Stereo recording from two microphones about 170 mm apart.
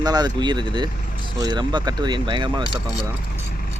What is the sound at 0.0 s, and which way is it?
Speech, 25° right (ahead or behind).